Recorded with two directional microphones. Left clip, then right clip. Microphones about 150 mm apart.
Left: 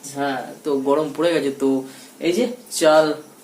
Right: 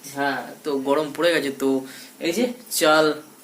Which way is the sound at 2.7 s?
20° right (ahead or behind).